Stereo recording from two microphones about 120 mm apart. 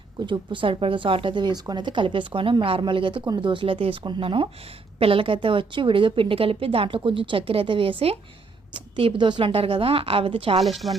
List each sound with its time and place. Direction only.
0.3 s a woman's voice: 45° right (ahead or behind)